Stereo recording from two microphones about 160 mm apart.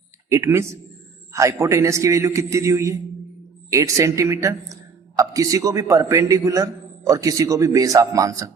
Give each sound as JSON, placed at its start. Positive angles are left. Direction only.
{"t": 0.3, "sound": "a man's voice", "side_deg": -15}